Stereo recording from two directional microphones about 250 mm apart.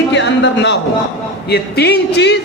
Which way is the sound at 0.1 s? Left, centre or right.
Left.